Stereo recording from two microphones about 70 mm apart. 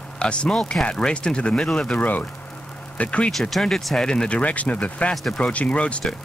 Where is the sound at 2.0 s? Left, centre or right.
Left.